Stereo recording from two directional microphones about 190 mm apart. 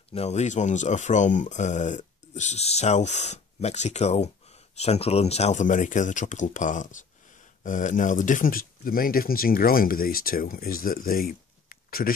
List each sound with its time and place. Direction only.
0.1 s speech: 35° left (ahead or behind); by 12.1 s 50° left (ahead or behind)